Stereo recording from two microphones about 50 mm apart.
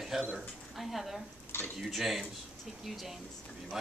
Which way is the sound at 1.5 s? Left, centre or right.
Left.